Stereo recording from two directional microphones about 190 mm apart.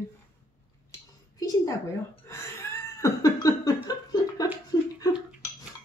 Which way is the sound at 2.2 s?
15° left (ahead or behind).